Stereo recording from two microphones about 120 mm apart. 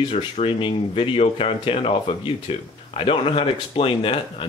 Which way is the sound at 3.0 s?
50° left (ahead or behind).